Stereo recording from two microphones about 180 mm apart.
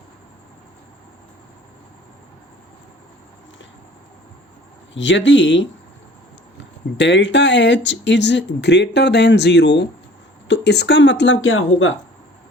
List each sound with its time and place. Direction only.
4.9 s speech: 90° left